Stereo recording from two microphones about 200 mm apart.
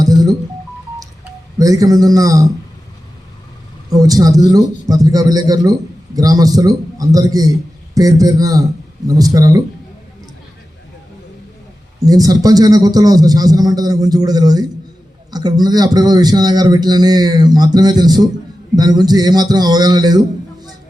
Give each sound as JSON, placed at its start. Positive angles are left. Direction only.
{"t": 0.0, "sound": "music", "side_deg": -20}
{"t": 1.5, "sound": "a man's voice", "side_deg": -15}
{"t": 3.9, "sound": "a man's voice", "side_deg": -20}
{"t": 11.9, "sound": "a man's voice", "side_deg": -20}